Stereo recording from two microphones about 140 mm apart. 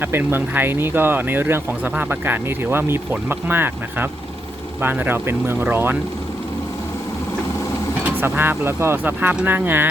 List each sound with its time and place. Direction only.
0.0 s speech: 15° right (ahead or behind)
8.0 s speech: 15° right (ahead or behind)